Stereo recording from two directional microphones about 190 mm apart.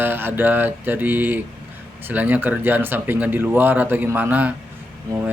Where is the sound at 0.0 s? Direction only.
10° right (ahead or behind).